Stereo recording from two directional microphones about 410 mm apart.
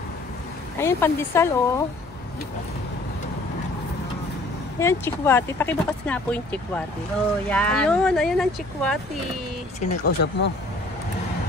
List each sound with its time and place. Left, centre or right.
0.7 s speech: centre
4.7 s speech: centre
9.8 s speech: centre